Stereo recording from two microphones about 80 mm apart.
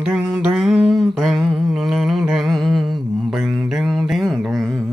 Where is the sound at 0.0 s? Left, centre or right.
Centre.